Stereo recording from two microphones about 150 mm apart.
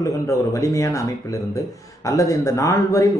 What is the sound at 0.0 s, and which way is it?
Speech, 20° left (ahead or behind).